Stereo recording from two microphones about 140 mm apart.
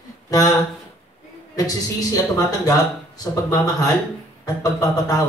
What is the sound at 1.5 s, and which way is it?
A man's voice, 25° left (ahead or behind).